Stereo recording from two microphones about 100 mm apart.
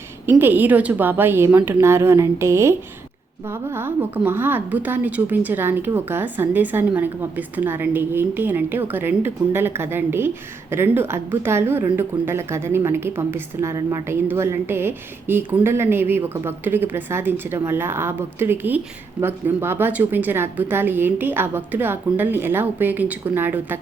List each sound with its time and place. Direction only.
0.3 s a woman's voice: 20° right (ahead or behind)